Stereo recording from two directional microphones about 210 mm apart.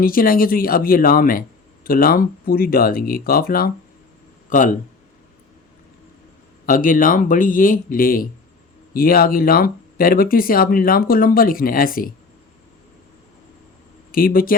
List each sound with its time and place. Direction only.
0.0 s speech: 45° left (ahead or behind)
6.7 s a man's voice: 40° left (ahead or behind)
14.1 s speech: 45° left (ahead or behind)